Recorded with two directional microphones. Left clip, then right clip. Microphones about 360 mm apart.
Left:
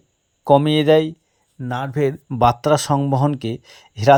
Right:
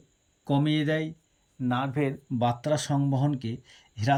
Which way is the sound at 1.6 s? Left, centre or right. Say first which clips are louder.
Left 7 dB; centre.